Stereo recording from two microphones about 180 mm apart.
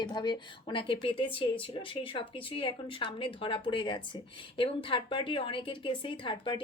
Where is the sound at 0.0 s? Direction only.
25° left (ahead or behind).